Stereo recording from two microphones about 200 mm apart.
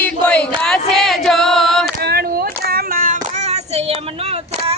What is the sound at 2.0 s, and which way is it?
Child singing, 50° right (ahead or behind).